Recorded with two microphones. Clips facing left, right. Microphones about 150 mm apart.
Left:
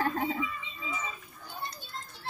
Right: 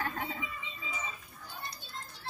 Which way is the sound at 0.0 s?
35° left (ahead or behind).